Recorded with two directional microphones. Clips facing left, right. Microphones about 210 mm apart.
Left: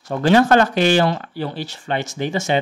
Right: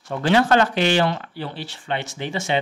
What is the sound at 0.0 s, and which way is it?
Speech, 45° left (ahead or behind).